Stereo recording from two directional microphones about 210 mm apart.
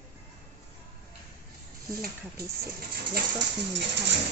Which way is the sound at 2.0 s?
45° right (ahead or behind).